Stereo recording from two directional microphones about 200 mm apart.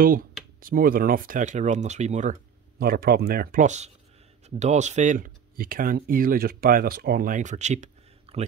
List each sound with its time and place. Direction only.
0.0 s speech: 45° right (ahead or behind)
2.8 s speech: 50° right (ahead or behind); by 8.5 s 35° right (ahead or behind)